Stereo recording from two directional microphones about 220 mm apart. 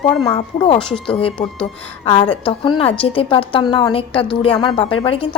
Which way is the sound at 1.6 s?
25° left (ahead or behind).